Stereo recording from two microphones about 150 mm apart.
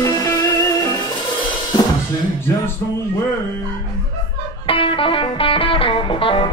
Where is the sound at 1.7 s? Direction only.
30° left (ahead or behind).